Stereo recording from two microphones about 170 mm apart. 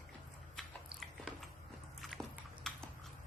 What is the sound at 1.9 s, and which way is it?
Biting, centre (ahead or behind).